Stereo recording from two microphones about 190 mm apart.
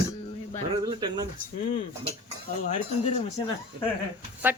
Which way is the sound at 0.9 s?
20° right (ahead or behind).